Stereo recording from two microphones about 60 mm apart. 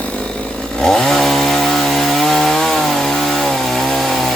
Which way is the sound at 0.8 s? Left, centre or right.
Centre.